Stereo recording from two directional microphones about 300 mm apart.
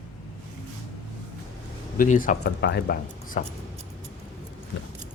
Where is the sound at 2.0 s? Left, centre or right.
Left.